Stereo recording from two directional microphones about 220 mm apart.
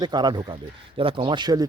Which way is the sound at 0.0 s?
20° right (ahead or behind).